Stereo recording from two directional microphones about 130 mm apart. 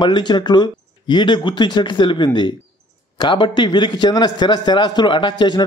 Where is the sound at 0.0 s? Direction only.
35° left (ahead or behind).